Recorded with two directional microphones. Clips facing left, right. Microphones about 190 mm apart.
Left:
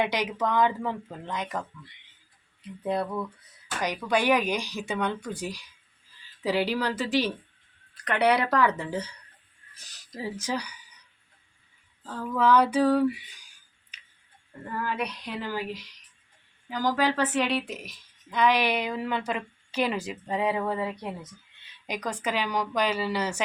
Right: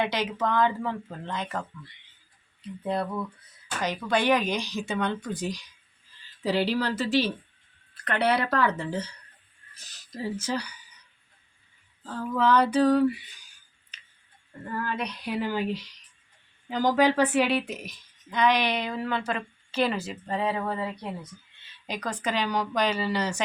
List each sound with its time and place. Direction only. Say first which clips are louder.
0.0 s a woman's voice: even; 15° left (ahead or behind)
2.8 s a woman's voice: left 1 dB; 15° left (ahead or behind)
12.4 s a woman's voice: even; 10° left (ahead or behind)
13.9 s tick-tock: right 1 dB; 15° left (ahead or behind)
14.8 s a woman's voice: left 2 dB; 10° left (ahead or behind)
15.2 s speech: right 4 dB; 10° right (ahead or behind)
16.6 s a woman's voice: right 3 dB; 20° right (ahead or behind); by 23.4 s 10° left (ahead or behind)